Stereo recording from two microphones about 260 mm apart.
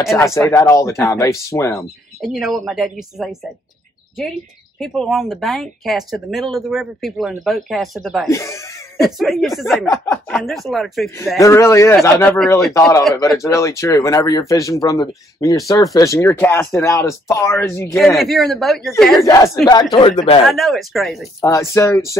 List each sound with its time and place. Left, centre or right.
0.0 s speech: centre
2.2 s speech: centre
8.3 s laughter: centre
9.0 s speech: centre
9.8 s speech: centre
10.3 s speech: centre
11.3 s speech: centre
19.2 s speech: centre
20.4 s speech: centre
21.4 s speech: centre